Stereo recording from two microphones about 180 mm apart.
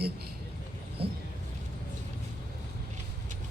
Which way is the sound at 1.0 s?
30° right (ahead or behind).